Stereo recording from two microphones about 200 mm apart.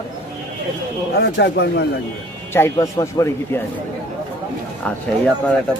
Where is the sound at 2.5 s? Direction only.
15° left (ahead or behind).